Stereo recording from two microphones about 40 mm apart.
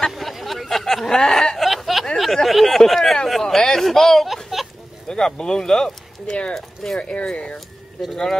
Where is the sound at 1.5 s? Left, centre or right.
Centre.